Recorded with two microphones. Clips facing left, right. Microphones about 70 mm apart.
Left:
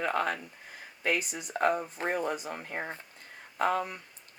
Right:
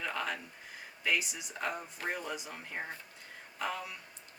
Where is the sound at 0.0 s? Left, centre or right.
Left.